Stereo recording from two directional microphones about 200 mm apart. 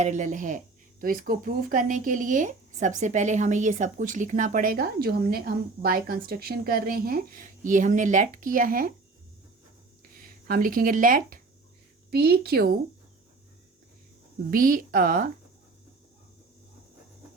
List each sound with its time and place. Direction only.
0.0 s speech: 40° right (ahead or behind)
10.2 s a woman's voice: 45° right (ahead or behind)
14.5 s a woman's voice: 45° right (ahead or behind)